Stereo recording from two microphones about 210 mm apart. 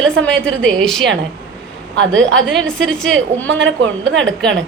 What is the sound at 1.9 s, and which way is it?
Speech, 60° right (ahead or behind).